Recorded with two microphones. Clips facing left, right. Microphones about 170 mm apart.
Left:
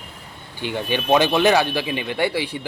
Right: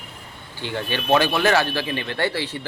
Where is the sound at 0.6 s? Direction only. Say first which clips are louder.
Left 3 dB; 15° left (ahead or behind).